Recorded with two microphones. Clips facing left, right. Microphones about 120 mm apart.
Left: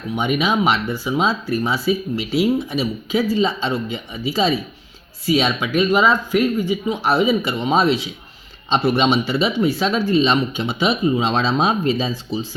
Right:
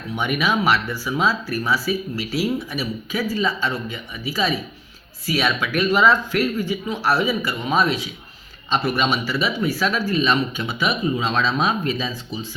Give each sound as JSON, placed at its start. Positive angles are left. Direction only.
{"t": 0.2, "sound": "speech", "side_deg": 20}